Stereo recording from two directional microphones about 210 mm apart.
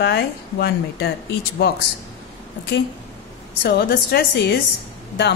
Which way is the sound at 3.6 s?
50° left (ahead or behind).